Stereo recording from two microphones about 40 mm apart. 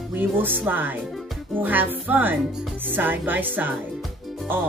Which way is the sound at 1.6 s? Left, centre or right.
Right.